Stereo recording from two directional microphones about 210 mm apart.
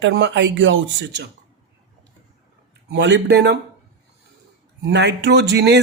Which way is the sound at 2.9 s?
55° right (ahead or behind).